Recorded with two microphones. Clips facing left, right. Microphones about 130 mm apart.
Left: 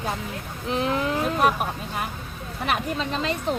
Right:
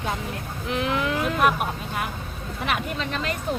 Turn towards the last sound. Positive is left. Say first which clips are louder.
# left 2 dB
turn(degrees=25)  # may be behind; listen again after turning